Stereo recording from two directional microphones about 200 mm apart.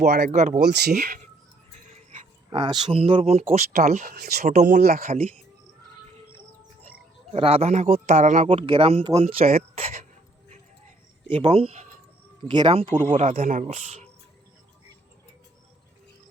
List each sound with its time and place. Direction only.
0.3 s speech: 35° right (ahead or behind)
0.6 s speech: 55° right (ahead or behind)
2.5 s speech: 25° right (ahead or behind); by 5.1 s 45° right (ahead or behind)
7.3 s speech: 30° right (ahead or behind)
8.4 s speech: 25° right (ahead or behind)
9.4 s speech: 45° right (ahead or behind)
11.3 s speech: 30° right (ahead or behind)